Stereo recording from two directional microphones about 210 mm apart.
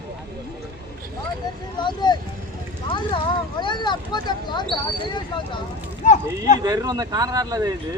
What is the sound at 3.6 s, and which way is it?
Speech, 20° left (ahead or behind).